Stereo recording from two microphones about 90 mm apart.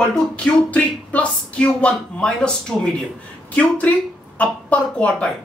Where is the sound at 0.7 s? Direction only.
15° left (ahead or behind).